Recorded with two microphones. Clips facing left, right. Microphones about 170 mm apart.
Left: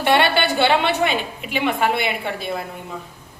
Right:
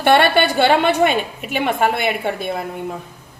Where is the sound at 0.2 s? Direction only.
50° right (ahead or behind).